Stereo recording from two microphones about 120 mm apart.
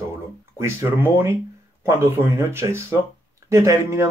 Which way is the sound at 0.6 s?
20° right (ahead or behind).